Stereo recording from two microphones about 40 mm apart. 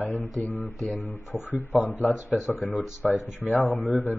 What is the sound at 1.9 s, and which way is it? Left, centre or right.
Mantra, left.